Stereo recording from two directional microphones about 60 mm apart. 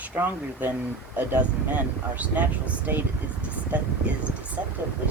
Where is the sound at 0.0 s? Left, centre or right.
Right.